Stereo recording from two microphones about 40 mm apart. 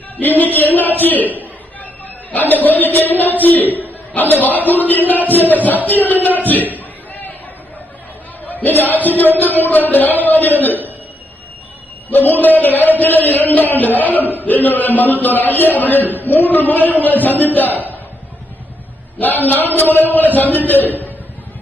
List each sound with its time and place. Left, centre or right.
0.2 s a sound: left
0.9 s a man's voice: left
2.3 s a man's voice: left
2.9 s music: left
3.3 s a man's voice: left
6.7 s a sound: left
8.4 s a man's voice: left
12.1 s a man's voice: left
14.0 s a sound: left
14.4 s a man's voice: left
19.2 s a man's voice: left